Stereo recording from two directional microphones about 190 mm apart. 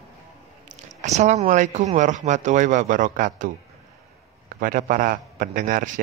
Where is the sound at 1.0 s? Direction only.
35° right (ahead or behind).